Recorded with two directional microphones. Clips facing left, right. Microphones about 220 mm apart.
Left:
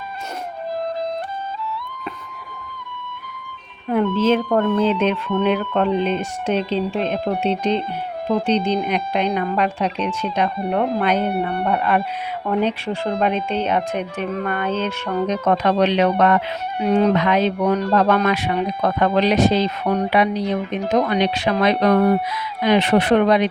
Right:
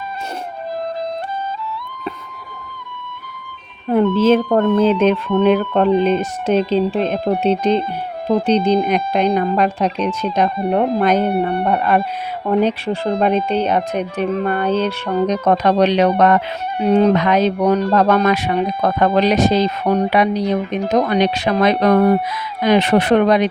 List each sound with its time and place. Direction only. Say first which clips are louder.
3.8 s speech: right 4 dB; 40° right (ahead or behind)